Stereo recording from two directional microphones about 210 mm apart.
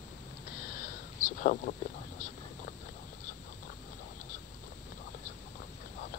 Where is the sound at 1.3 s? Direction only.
40° left (ahead or behind).